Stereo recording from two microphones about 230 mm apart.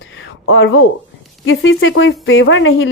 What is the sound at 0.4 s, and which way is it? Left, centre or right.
A woman's voice, left.